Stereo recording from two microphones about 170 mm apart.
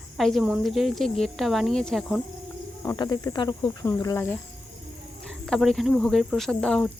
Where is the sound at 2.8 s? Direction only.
20° left (ahead or behind).